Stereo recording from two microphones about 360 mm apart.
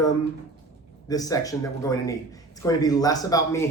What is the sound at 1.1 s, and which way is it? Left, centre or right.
A man's voice, centre.